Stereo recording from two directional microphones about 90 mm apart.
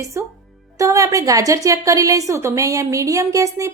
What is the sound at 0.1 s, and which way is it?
A woman's voice, 30° right (ahead or behind).